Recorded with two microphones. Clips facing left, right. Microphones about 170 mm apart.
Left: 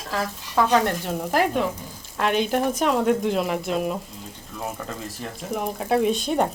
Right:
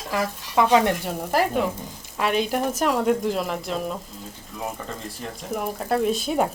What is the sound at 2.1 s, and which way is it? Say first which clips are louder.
Speech: left 1 dB; 5° right (ahead or behind).